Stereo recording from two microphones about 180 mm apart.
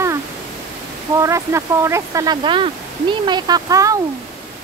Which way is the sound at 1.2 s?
15° right (ahead or behind).